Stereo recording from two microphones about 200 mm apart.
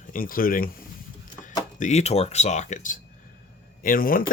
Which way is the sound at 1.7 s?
35° left (ahead or behind).